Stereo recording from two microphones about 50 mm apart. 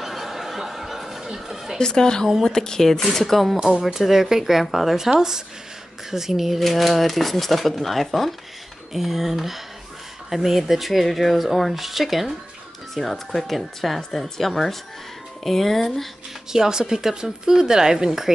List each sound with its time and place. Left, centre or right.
0.0 s a sound: centre
1.8 s speech: centre
3.5 s speech: centre
3.8 s speech: centre
16.5 s speech: centre